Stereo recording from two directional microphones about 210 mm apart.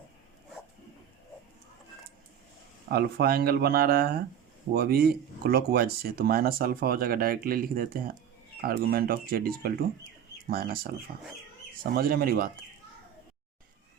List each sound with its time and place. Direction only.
2.9 s speech: 45° right (ahead or behind)
11.8 s speech: 45° right (ahead or behind)